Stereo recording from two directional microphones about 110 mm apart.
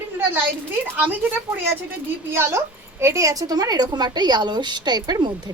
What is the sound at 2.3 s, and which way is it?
A woman's voice, 25° right (ahead or behind).